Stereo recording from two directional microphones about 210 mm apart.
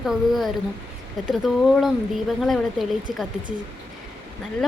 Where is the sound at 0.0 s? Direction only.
Centre (ahead or behind).